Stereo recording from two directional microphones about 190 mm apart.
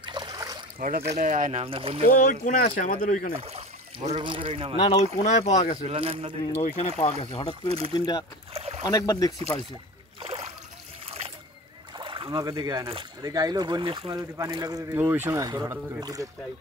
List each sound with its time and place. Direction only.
0.0 s a sound: 25° right (ahead or behind)
0.7 s speech: 45° right (ahead or behind); by 2.0 s 30° right (ahead or behind)
2.0 s speech: 50° left (ahead or behind)
3.3 s speech: 35° right (ahead or behind)
4.7 s speech: 30° left (ahead or behind)
5.9 s speech: 30° right (ahead or behind)
7.0 s speech: 35° left (ahead or behind)
7.6 s speech: 30° right (ahead or behind)
8.0 s speech: 20° left (ahead or behind)
8.5 s boat: 35° right (ahead or behind)
8.8 s speech: 20° left (ahead or behind)
10.2 s a sound: 30° right (ahead or behind)
12.0 s speech: 25° right (ahead or behind)